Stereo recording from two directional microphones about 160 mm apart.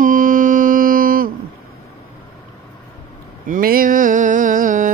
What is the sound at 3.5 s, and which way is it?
Mantra, 65° right (ahead or behind).